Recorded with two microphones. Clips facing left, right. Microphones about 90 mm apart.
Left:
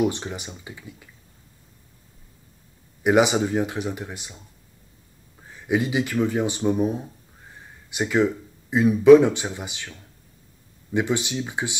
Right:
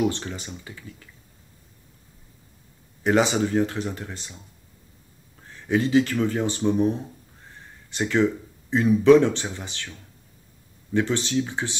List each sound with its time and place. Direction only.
0.0 s speech: 15° left (ahead or behind)
3.0 s speech: 15° left (ahead or behind)
5.5 s speech: 10° left (ahead or behind)